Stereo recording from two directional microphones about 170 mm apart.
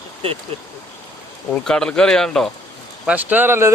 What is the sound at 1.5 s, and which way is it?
Speech, 5° left (ahead or behind).